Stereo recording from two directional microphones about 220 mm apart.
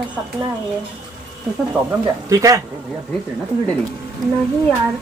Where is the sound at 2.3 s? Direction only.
15° right (ahead or behind).